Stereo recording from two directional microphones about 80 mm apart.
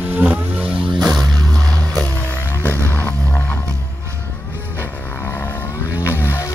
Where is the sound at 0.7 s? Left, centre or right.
Right.